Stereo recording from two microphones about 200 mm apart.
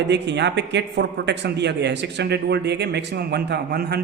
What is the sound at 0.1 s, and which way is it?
A man's voice, 60° right (ahead or behind).